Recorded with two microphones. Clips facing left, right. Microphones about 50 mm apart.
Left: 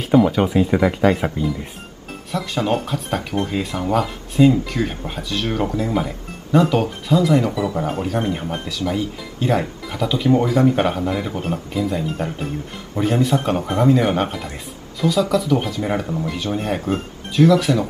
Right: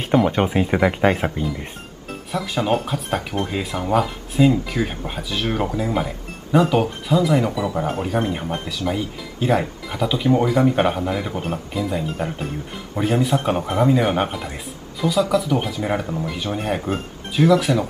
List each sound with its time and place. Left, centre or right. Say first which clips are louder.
0.0 s music: left 3 dB; centre
0.4 s speech: left 1 dB; right
1.2 s speech: left 2 dB; centre